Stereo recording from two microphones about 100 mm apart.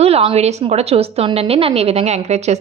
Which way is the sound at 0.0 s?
80° right.